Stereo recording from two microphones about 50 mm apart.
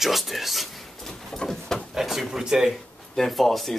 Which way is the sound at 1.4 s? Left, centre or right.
Centre.